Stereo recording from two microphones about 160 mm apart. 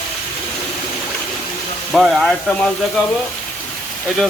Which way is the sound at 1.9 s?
Centre (ahead or behind).